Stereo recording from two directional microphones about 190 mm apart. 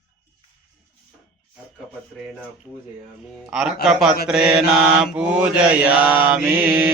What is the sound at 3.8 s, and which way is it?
Mantra, centre (ahead or behind).